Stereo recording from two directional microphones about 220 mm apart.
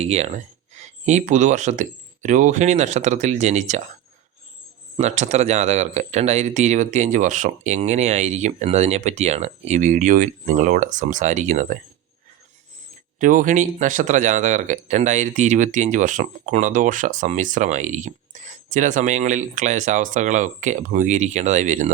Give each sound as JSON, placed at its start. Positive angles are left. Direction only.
{"t": 0.0, "sound": "speech", "side_deg": -30}
{"t": 4.9, "sound": "speech", "side_deg": -30}
{"t": 13.1, "sound": "speech", "side_deg": -35}